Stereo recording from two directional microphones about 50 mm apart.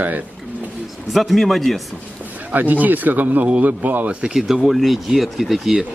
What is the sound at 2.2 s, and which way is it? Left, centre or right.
Speech, right.